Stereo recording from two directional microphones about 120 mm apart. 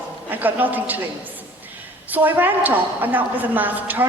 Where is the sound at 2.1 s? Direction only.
15° right (ahead or behind).